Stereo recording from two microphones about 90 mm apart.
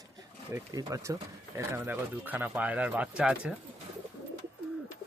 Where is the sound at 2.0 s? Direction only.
20° right (ahead or behind).